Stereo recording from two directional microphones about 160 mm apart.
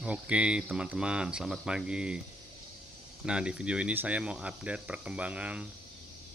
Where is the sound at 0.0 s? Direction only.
5° right (ahead or behind).